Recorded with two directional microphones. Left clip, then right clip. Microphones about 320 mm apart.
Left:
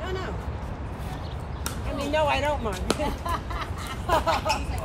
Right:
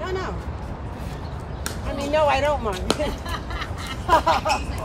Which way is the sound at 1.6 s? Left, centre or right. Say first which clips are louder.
Right 3 dB; right.